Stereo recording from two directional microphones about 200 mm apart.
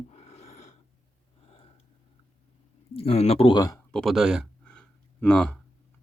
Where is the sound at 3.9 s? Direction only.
Centre (ahead or behind).